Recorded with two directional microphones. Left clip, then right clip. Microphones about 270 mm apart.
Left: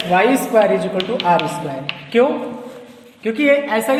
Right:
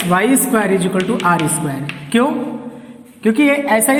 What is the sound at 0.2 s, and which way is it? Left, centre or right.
Speech, right.